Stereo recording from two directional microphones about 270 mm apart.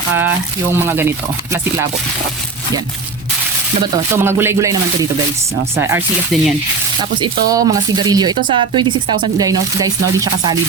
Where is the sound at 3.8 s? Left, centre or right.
Centre.